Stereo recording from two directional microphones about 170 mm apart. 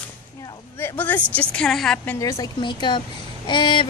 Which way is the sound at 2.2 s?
20° left (ahead or behind).